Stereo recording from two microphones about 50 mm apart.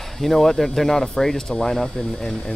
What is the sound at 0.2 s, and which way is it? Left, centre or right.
Speech, centre.